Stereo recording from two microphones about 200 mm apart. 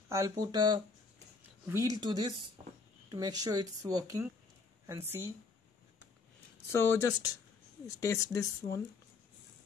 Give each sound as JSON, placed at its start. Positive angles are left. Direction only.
{"t": 0.1, "sound": "speech", "side_deg": -20}
{"t": 6.7, "sound": "speech", "side_deg": 15}